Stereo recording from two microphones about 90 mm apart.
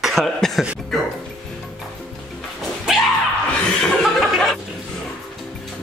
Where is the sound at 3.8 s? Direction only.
Centre (ahead or behind).